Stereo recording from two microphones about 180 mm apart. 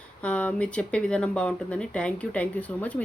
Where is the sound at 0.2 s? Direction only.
5° left (ahead or behind).